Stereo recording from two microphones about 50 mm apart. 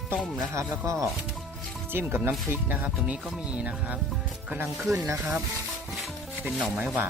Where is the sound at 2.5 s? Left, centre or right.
Right.